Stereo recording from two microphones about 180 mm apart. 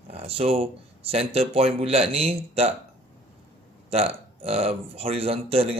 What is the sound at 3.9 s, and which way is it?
Speech, 30° right (ahead or behind).